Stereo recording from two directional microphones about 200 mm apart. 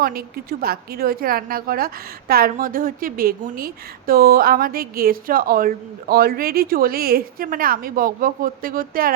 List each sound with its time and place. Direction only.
0.0 s a woman's voice: 50° right (ahead or behind)